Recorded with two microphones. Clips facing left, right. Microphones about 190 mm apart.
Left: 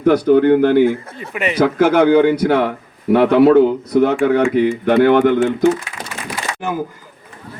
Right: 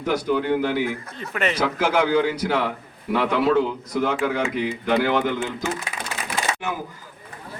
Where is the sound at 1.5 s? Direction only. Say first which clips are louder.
Left 10 dB; 55° left (ahead or behind).